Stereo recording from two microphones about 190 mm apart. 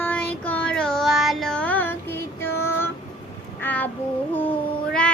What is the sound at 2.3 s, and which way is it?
Female singing, 15° left (ahead or behind).